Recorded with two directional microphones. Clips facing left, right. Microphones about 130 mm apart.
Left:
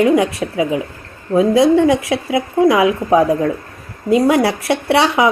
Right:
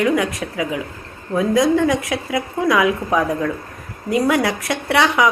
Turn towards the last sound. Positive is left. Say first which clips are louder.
# left 3 dB
turn(degrees=25)  # may be behind; listen again after turning